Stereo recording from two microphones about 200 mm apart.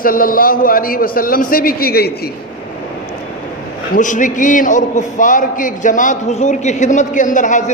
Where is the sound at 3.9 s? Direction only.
40° left (ahead or behind).